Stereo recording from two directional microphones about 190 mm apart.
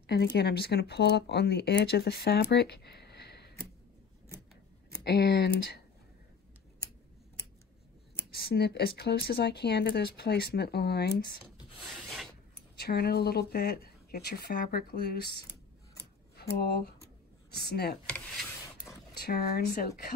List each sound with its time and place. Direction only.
0.0 s speech: 55° left (ahead or behind)
4.9 s speech: 60° left (ahead or behind)
8.3 s speech: 60° left (ahead or behind)
12.5 s speech: 55° left (ahead or behind)
19.1 s speech: 55° left (ahead or behind)